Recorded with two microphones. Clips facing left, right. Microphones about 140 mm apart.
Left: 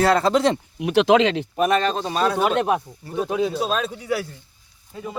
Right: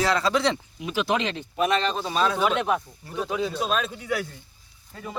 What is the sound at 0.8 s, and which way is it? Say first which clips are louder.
Speech: left 10 dB; 75° left (ahead or behind).